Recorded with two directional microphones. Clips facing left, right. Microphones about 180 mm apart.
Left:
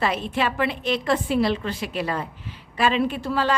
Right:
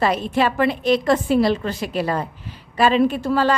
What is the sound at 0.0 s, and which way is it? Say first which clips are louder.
A woman's voice: right 5 dB; 40° right (ahead or behind).